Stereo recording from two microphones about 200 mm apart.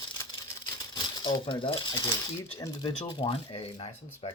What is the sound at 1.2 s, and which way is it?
Speech, 25° left (ahead or behind).